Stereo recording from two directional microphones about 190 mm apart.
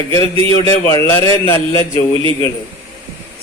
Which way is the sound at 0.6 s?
15° left (ahead or behind).